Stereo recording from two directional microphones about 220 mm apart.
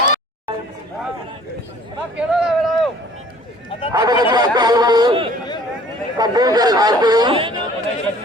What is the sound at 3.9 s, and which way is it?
Speech, 20° right (ahead or behind).